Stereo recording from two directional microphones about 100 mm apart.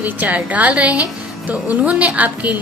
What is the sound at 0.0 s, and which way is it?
A woman's voice, 15° right (ahead or behind).